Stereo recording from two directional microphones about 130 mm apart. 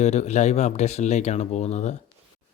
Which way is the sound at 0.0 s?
60° left (ahead or behind).